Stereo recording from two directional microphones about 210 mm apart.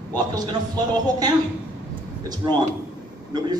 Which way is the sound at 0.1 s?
20° right (ahead or behind).